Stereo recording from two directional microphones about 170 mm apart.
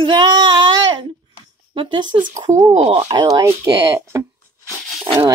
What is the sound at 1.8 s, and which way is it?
Speech, 30° right (ahead or behind).